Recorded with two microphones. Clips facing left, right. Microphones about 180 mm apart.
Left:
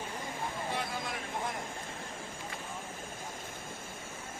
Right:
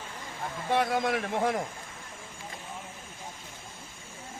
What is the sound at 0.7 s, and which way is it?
Speech, 70° right (ahead or behind).